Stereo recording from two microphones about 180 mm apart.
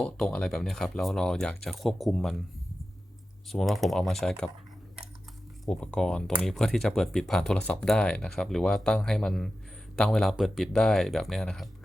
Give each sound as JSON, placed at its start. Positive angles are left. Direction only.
{"t": 0.0, "sound": "speech", "side_deg": 5}
{"t": 3.5, "sound": "speech", "side_deg": 0}
{"t": 5.6, "sound": "speech", "side_deg": 5}